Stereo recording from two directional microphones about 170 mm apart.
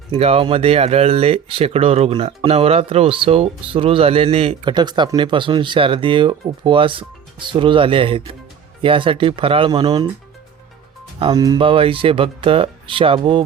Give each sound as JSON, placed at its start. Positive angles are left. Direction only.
{"t": 0.1, "sound": "speech", "side_deg": -35}
{"t": 11.2, "sound": "speech", "side_deg": -20}